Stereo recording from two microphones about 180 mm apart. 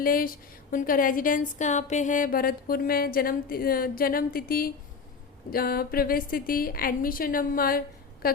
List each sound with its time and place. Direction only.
0.0 s a woman's voice: 50° left (ahead or behind)